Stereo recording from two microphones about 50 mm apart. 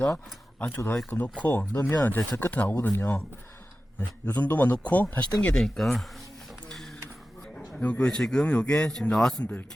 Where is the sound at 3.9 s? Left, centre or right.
Left.